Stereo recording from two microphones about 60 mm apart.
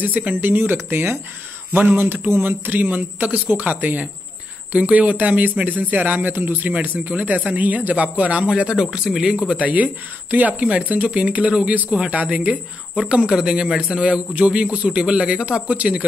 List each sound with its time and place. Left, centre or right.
0.0 s a man's voice: right; by 9.6 s centre
9.6 s a man's voice: right; by 14.0 s centre
14.0 s a man's voice: right